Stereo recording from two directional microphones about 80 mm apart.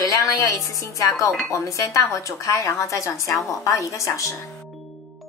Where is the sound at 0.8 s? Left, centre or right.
Left.